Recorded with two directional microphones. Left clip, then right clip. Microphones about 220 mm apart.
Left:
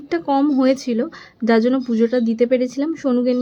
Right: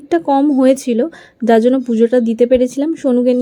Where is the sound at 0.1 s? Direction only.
15° right (ahead or behind).